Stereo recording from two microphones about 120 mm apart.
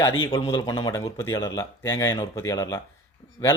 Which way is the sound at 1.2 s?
25° left (ahead or behind).